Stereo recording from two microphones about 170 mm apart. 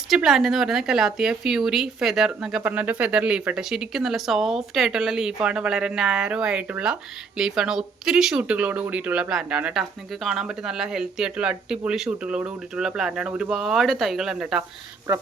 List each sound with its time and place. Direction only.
0.1 s a woman's voice: centre (ahead or behind)
15.1 s speech: 15° right (ahead or behind)